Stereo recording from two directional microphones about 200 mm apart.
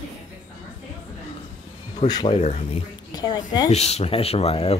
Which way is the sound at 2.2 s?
30° left (ahead or behind).